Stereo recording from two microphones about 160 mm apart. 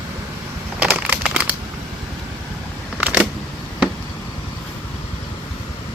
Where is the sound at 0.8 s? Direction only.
10° right (ahead or behind).